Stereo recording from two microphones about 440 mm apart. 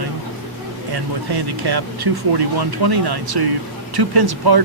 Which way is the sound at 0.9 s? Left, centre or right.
Right.